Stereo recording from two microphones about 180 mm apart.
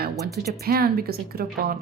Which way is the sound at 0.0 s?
60° right (ahead or behind).